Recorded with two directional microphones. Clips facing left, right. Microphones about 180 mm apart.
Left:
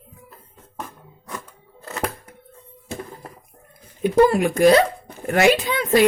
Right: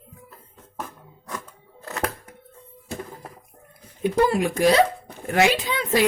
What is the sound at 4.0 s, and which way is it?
Speech, 50° left (ahead or behind).